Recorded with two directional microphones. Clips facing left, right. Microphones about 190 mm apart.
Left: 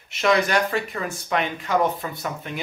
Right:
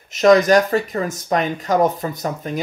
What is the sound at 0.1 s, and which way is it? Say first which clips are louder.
Speech: right 8 dB; 40° right (ahead or behind).